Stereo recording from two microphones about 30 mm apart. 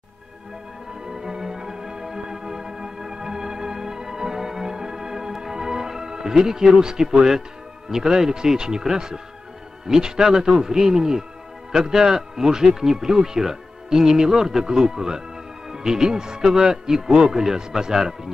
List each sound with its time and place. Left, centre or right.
1.0 s music: centre
6.8 s a man's voice: right